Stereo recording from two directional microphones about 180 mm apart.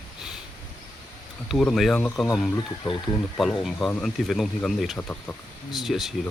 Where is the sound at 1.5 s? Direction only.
Centre (ahead or behind).